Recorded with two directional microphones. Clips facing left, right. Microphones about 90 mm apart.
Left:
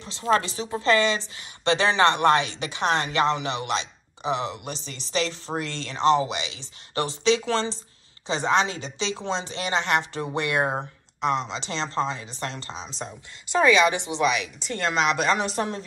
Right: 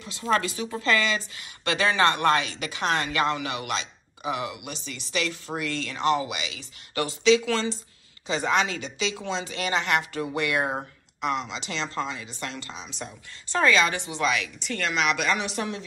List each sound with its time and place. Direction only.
0.0 s a woman's voice: 30° left (ahead or behind)
13.5 s a woman's voice: 15° left (ahead or behind); by 15.8 s 35° left (ahead or behind)